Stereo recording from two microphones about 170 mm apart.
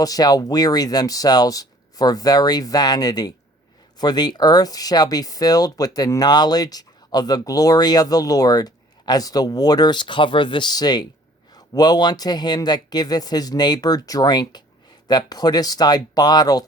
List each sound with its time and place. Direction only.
0.0 s speech: 20° left (ahead or behind)